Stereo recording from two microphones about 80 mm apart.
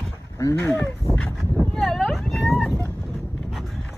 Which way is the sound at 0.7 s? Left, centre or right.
Left.